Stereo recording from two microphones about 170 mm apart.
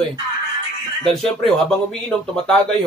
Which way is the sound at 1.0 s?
5° left (ahead or behind).